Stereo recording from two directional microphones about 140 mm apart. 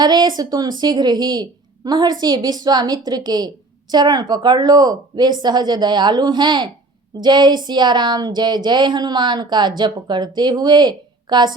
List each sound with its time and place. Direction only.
0.0 s a woman's voice: 30° right (ahead or behind)